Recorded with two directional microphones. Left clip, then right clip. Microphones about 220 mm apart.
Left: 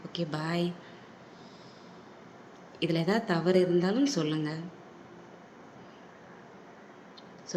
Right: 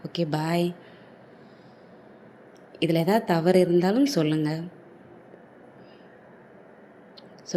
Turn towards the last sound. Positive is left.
turn(degrees=-25)  # may be behind; listen again after turning